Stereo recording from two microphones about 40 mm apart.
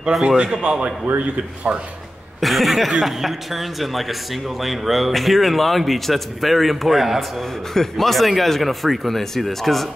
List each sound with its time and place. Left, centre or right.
0.1 s speech: centre
0.7 s speech: centre
2.4 s speech: centre
7.2 s speech: centre